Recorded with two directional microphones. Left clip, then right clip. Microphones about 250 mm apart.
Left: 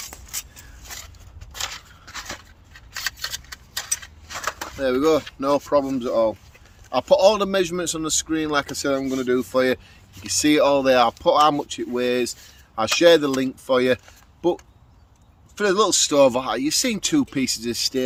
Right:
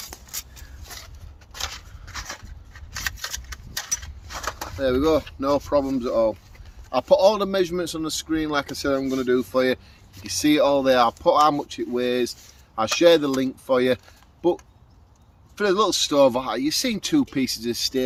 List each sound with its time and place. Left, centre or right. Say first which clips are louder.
1.5 s a sound: left 2 dB; centre
3.8 s mechanisms: left 1 dB; centre
4.8 s speech: left 1 dB; centre
15.5 s speech: left 1 dB; centre